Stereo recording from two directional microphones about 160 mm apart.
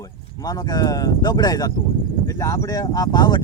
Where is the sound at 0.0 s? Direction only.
20° left (ahead or behind).